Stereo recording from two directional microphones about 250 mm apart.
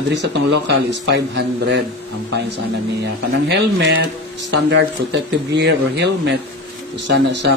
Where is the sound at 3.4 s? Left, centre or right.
Right.